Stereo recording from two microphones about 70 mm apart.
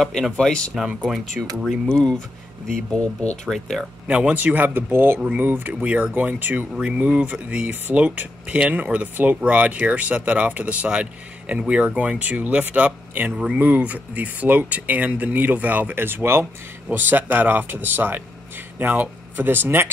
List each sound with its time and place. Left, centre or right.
0.0 s speech: centre
0.7 s speech: centre
1.9 s speech: centre
3.4 s speech: centre
4.1 s speech: centre
6.7 s speech: centre; by 19.9 s right